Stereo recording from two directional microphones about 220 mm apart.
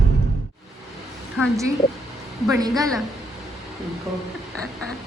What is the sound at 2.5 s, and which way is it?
Speech, 15° right (ahead or behind).